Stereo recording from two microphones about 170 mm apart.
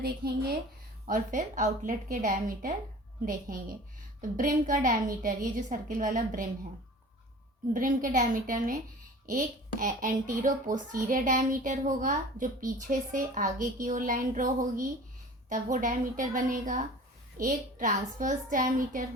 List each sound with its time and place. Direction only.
1.0 s a child's voice: 50° right (ahead or behind)
7.7 s a child's voice: 50° right (ahead or behind)